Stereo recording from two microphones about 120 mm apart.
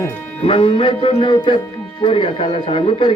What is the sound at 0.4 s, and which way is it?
A man's voice, 50° left (ahead or behind).